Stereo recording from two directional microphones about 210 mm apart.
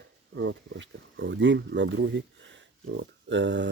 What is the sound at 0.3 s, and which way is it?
Speech, 60° right (ahead or behind).